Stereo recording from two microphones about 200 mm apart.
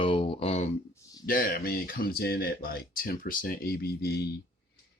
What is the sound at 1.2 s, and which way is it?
Speech, 45° left (ahead or behind).